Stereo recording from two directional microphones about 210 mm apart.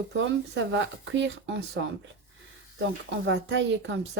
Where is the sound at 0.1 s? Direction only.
60° right (ahead or behind).